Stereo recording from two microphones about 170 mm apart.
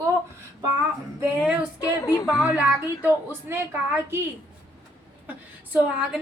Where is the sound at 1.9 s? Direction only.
20° left (ahead or behind).